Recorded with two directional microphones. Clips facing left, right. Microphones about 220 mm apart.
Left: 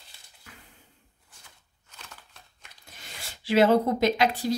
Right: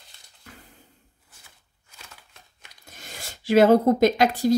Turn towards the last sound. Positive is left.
turn(degrees=-45)  # may be behind; listen again after turning